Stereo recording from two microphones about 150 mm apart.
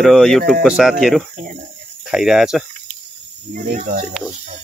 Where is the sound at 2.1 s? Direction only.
5° right (ahead or behind).